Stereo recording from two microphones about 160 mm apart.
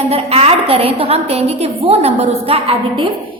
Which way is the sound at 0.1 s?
40° right (ahead or behind).